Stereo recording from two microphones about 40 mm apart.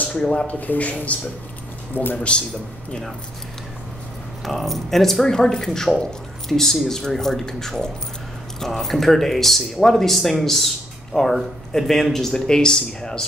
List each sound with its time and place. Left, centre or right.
0.5 s speech: left
2.1 s speech: left
4.5 s speech: centre